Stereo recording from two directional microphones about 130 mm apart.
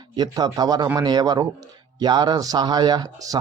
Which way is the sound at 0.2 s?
30° right (ahead or behind).